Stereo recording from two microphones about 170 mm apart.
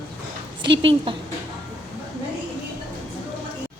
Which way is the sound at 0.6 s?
30° right (ahead or behind).